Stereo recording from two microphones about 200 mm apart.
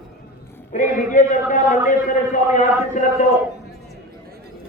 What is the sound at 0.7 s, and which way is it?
A man's voice, 40° left (ahead or behind).